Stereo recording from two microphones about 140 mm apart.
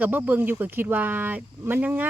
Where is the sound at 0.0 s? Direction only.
15° right (ahead or behind).